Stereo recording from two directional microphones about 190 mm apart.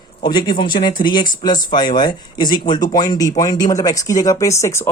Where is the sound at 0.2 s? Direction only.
25° left (ahead or behind).